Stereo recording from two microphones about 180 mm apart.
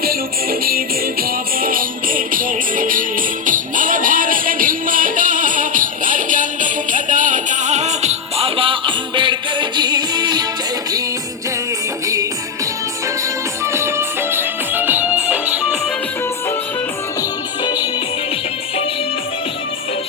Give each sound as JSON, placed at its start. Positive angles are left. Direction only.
{"t": 0.6, "sound": "music", "side_deg": -55}
{"t": 12.0, "sound": "music", "side_deg": -20}
{"t": 13.7, "sound": "music", "side_deg": -15}